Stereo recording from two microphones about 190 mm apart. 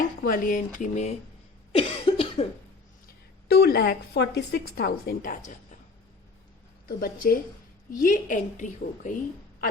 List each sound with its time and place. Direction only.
0.2 s a woman's voice: 45° left (ahead or behind)
1.7 s cough: 30° left (ahead or behind)
3.5 s a woman's voice: 55° left (ahead or behind)
6.8 s a woman's voice: 50° left (ahead or behind)